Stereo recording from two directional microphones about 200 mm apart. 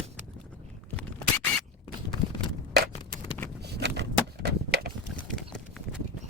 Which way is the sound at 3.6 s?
60° right (ahead or behind).